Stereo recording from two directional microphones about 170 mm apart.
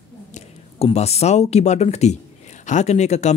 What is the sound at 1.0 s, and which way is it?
Speech, 40° left (ahead or behind).